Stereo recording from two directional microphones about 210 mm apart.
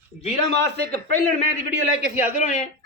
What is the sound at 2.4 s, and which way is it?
Speech, 35° left (ahead or behind).